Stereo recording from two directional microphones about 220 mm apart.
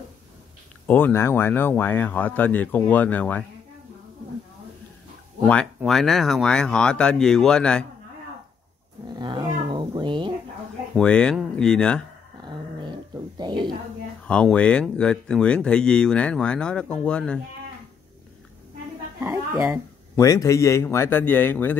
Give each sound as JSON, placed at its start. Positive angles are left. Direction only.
{"t": 0.8, "sound": "speech", "side_deg": 10}
{"t": 5.4, "sound": "speech", "side_deg": 5}
{"t": 9.0, "sound": "roaring cats", "side_deg": -20}
{"t": 9.7, "sound": "cat", "side_deg": -20}
{"t": 11.0, "sound": "speech", "side_deg": 5}
{"t": 12.4, "sound": "a sound", "side_deg": -20}
{"t": 14.2, "sound": "speech", "side_deg": 5}
{"t": 19.2, "sound": "speech", "side_deg": -10}
{"t": 20.2, "sound": "speech", "side_deg": 15}